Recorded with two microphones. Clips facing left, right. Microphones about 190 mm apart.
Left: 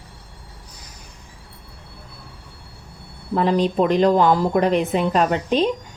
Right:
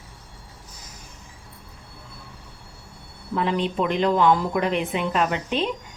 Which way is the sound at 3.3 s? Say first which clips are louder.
Left 5 dB; 40° left (ahead or behind).